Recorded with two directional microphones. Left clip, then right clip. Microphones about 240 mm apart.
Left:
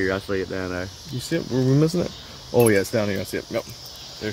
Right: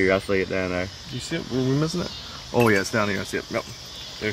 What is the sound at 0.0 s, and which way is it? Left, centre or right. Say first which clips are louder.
Speech: right 3 dB; centre.